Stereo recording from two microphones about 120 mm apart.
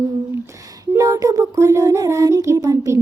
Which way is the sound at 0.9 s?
25° right (ahead or behind).